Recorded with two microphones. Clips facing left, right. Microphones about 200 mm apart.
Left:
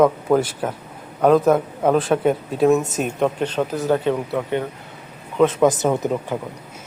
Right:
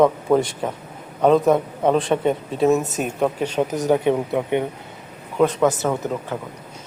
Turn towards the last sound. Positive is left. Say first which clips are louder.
# left 3 dB
turn(degrees=15)  # may be behind; listen again after turning